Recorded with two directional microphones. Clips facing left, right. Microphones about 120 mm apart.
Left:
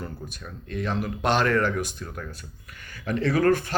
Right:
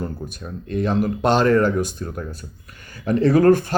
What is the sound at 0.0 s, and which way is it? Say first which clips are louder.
Speech: right 7 dB; 40° right (ahead or behind).